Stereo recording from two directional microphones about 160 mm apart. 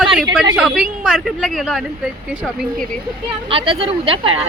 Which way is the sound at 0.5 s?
5° right (ahead or behind).